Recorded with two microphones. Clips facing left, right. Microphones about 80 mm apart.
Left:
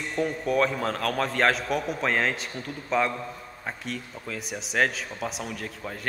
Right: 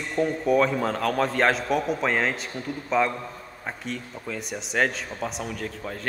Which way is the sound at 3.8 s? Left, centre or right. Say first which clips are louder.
Right 2 dB; centre.